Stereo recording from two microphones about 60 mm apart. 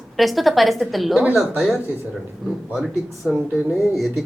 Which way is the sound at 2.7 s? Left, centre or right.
Centre.